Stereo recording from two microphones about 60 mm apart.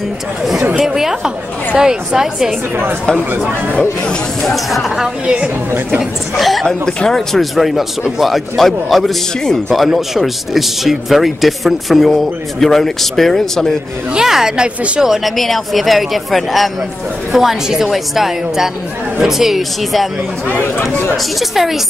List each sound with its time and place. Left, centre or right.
0.7 s a woman's voice: centre
4.4 s speech: centre
5.2 s a woman's voice: centre
6.3 s speech: centre
9.9 s speech: centre
14.1 s a woman's voice: centre
21.4 s speech: centre